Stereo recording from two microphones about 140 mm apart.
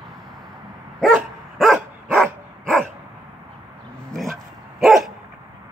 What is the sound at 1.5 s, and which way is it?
Dog, centre (ahead or behind).